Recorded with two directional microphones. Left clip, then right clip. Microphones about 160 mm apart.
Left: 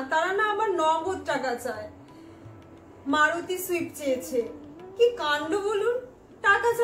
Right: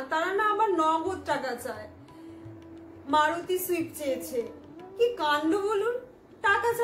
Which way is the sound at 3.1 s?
20° right (ahead or behind).